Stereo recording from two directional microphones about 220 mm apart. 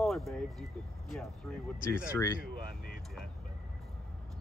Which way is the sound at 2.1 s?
15° left (ahead or behind).